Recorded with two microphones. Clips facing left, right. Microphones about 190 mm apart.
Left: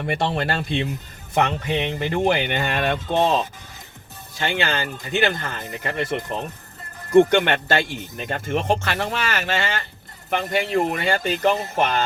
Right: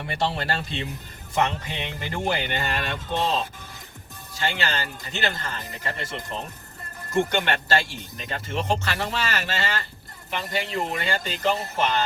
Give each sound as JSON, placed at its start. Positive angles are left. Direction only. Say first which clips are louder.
{"t": 0.1, "sound": "speech", "louder": "left 3 dB", "side_deg": 55}
{"t": 7.2, "sound": "speech", "louder": "left 8 dB", "side_deg": 55}